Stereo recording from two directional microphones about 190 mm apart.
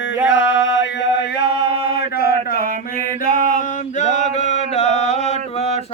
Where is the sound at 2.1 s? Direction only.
55° left (ahead or behind).